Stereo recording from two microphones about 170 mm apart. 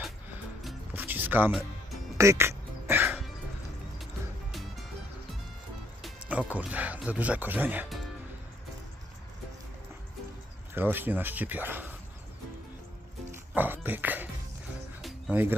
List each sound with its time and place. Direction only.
0.9 s music: 10° right (ahead or behind)
6.0 s speech: 10° right (ahead or behind)
10.8 s speech: 10° right (ahead or behind)
13.3 s speech: 10° right (ahead or behind)
15.0 s music: 10° right (ahead or behind)